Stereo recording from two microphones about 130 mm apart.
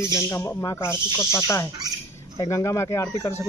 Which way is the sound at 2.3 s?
25° left (ahead or behind).